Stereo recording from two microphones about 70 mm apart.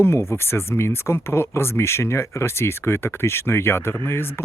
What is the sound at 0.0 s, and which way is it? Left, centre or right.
Speech, left.